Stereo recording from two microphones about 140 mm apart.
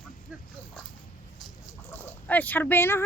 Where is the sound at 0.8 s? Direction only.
Centre (ahead or behind).